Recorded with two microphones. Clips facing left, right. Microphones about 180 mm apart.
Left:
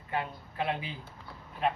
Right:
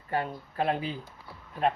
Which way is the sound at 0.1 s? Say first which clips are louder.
Right 4 dB; 40° right (ahead or behind).